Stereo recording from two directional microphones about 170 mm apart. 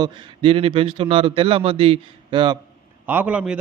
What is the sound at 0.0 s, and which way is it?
A man's voice, 35° right (ahead or behind).